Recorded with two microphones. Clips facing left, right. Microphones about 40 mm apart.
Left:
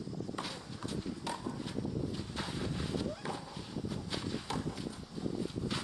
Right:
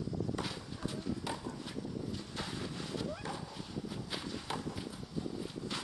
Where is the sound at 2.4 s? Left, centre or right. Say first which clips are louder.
Left 3 dB; centre.